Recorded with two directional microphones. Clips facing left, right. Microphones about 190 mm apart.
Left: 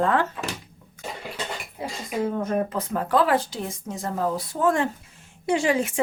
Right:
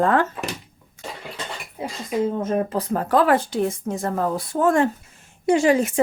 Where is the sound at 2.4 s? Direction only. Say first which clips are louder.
Right 2 dB; 25° right (ahead or behind).